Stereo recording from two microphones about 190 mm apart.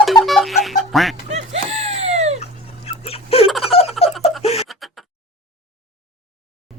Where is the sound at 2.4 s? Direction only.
35° left (ahead or behind).